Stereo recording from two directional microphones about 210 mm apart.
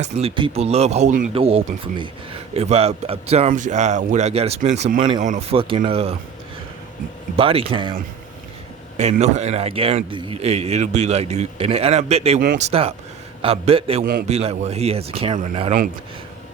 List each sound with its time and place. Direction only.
0.0 s speech: 30° right (ahead or behind)
7.3 s speech: 25° right (ahead or behind)
9.0 s a man's voice: 30° right (ahead or behind)
14.0 s a man's voice: 45° right (ahead or behind)
14.3 s a man's voice: 30° right (ahead or behind)